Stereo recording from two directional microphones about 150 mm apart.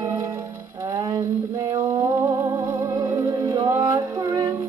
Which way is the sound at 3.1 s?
25° right (ahead or behind).